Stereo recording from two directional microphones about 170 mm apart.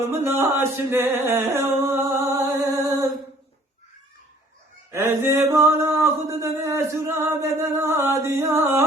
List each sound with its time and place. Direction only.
0.0 s music: 15° right (ahead or behind)
4.9 s music: 15° right (ahead or behind)